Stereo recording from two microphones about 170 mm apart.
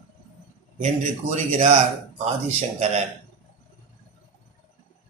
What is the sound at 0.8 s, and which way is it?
Speech, 45° right (ahead or behind).